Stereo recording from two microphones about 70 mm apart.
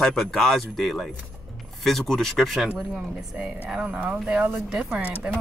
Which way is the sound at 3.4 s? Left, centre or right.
Centre.